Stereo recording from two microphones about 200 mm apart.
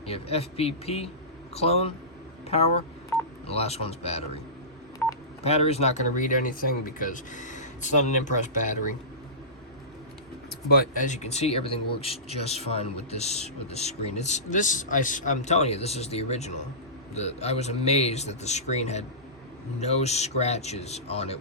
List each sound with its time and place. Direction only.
0.0 s a man's voice: 30° left (ahead or behind)
3.4 s a man's voice: 30° left (ahead or behind)
5.0 s telephone dialing: 10° left (ahead or behind)
5.4 s a man's voice: 30° left (ahead or behind)
10.7 s a man's voice: 45° left (ahead or behind)